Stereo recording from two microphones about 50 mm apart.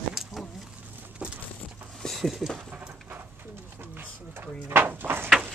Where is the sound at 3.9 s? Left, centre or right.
Right.